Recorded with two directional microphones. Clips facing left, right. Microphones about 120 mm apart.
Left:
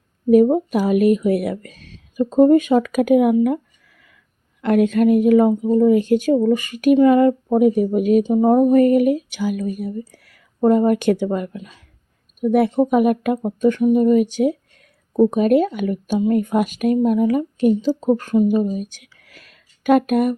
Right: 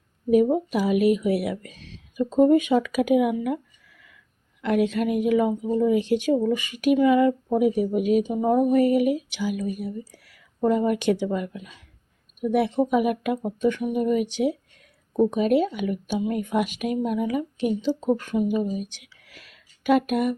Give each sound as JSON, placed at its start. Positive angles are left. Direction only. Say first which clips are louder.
{"t": 0.3, "sound": "speech", "louder": "left 6 dB", "side_deg": 45}
{"t": 3.4, "sound": "a sound", "louder": "left 8 dB", "side_deg": 45}
{"t": 4.6, "sound": "speech", "louder": "left 7 dB", "side_deg": 50}